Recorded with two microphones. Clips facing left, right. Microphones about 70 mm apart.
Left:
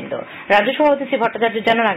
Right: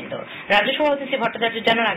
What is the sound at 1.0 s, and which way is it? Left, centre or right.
Speech, centre.